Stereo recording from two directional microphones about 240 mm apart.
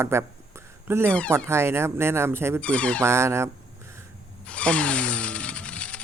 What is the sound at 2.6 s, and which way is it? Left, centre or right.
Speech, centre.